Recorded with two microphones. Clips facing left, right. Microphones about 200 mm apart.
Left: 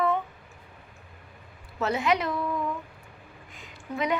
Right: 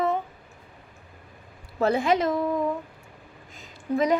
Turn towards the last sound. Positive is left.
turn(degrees=-40)  # may be behind; listen again after turning